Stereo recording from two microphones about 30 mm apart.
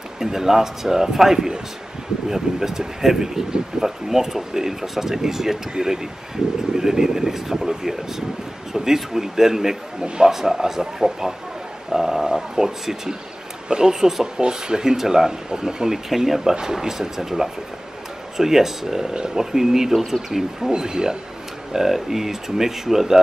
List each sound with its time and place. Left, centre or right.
0.2 s speech: centre
10.0 s speech: right
10.3 s speech: centre
12.3 s a sound: right
13.7 s speech: right
16.3 s speech: centre
20.7 s speech: right
21.7 s speech: centre